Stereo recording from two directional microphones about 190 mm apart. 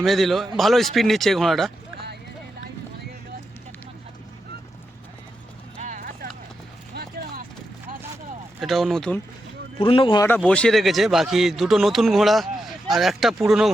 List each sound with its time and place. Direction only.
0.0 s a man's voice: centre (ahead or behind)
5.8 s clip-clop: 40° right (ahead or behind)
6.9 s a sound: 50° right (ahead or behind)
8.6 s a man's voice: centre (ahead or behind)
9.7 s speech: 30° left (ahead or behind)
10.2 s a man's voice: 10° left (ahead or behind)